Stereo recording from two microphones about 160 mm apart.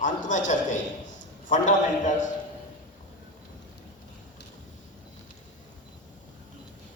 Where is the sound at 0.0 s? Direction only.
50° left (ahead or behind).